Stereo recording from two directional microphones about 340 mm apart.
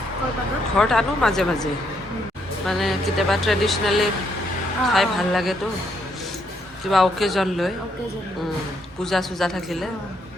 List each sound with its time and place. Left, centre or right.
0.8 s speech: centre
2.6 s speech: centre
6.8 s speech: centre
9.0 s speech: centre